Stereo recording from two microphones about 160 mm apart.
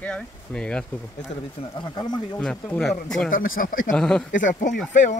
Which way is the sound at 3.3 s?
60° left (ahead or behind).